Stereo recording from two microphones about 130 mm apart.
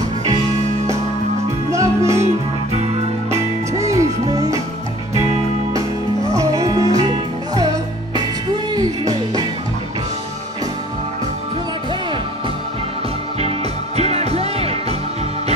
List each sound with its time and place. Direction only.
1.7 s music: 25° right (ahead or behind)
2.2 s music: 55° right (ahead or behind)
3.3 s music: 25° right (ahead or behind)
5.7 s music: 25° right (ahead or behind)
13.9 s music: 55° right (ahead or behind)